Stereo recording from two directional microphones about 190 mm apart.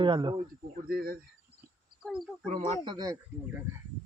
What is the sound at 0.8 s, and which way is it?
Speech, 50° right (ahead or behind).